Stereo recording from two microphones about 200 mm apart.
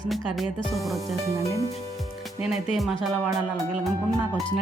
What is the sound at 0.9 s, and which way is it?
Music, 15° right (ahead or behind).